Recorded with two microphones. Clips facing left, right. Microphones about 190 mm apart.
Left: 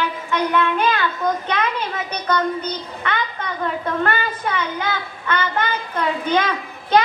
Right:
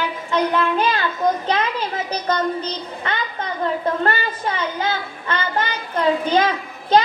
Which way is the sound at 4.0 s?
30° right (ahead or behind).